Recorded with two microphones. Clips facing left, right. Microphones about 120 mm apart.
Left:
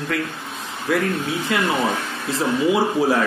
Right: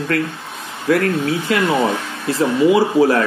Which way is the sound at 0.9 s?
70° right (ahead or behind).